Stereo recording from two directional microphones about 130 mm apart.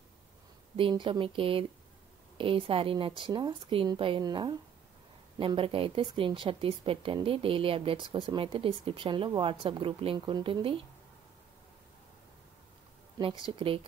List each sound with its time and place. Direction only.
0.7 s a woman's voice: 40° right (ahead or behind)
13.2 s speech: 40° right (ahead or behind)